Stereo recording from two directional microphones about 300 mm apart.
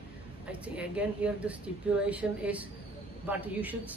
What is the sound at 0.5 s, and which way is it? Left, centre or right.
Speech, centre.